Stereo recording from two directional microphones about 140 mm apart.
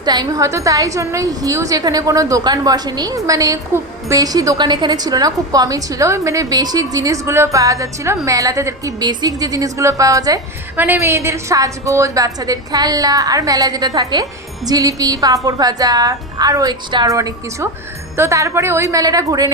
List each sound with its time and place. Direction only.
0.0 s a woman's voice: 30° right (ahead or behind)
10.8 s a woman's voice: 15° right (ahead or behind)